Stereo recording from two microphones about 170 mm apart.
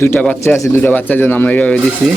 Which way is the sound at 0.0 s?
10° left (ahead or behind).